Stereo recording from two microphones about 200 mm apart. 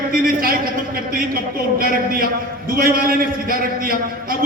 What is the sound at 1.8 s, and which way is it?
Speech, 45° right (ahead or behind).